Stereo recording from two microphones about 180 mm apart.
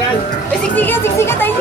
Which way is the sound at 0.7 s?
10° left (ahead or behind).